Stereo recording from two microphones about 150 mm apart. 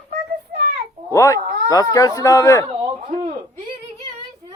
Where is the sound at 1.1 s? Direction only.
20° left (ahead or behind).